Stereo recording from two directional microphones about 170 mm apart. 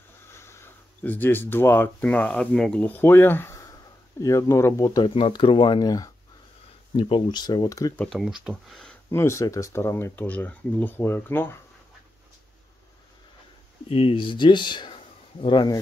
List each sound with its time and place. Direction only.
0.3 s speech: 15° left (ahead or behind)
5.1 s speech: 30° left (ahead or behind)
7.9 s speech: 5° left (ahead or behind)
9.1 s speech: 15° left (ahead or behind)
13.8 s speech: 35° left (ahead or behind)